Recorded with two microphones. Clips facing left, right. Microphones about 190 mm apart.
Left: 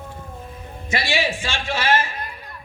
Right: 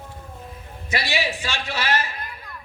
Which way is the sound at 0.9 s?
50° left (ahead or behind).